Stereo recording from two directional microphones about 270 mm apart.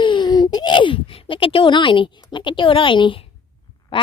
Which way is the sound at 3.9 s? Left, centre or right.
Centre.